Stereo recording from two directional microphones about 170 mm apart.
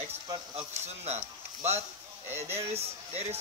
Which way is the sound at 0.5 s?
40° right (ahead or behind).